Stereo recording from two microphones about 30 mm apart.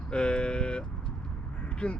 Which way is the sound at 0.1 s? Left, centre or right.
Left.